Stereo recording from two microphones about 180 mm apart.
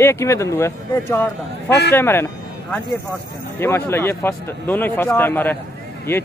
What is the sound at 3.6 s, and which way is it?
Speech, 15° left (ahead or behind).